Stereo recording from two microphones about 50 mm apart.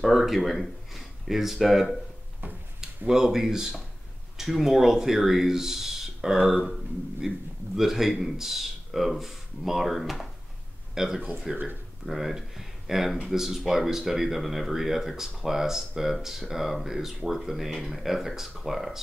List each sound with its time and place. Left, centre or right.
0.0 s speech: centre
3.1 s speech: centre